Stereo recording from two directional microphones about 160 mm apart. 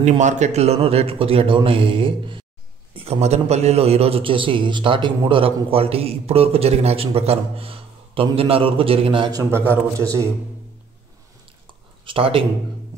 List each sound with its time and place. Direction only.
0.2 s a man's voice: 50° right (ahead or behind); by 9.4 s 30° right (ahead or behind)
9.4 s a man's voice: 15° right (ahead or behind)
11.6 s a sound: 30° right (ahead or behind)